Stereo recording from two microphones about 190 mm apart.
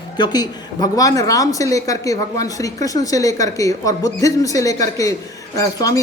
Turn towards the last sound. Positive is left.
turn(degrees=20)  # may be behind; listen again after turning